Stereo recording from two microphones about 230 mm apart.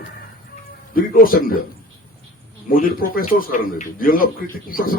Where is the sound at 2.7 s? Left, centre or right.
Left.